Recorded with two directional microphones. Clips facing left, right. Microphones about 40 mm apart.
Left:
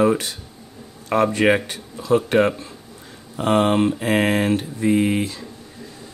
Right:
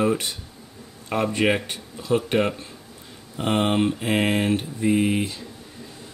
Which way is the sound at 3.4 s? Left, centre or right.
Centre.